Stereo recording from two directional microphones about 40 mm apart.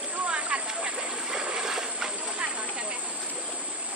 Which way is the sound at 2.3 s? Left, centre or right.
Right.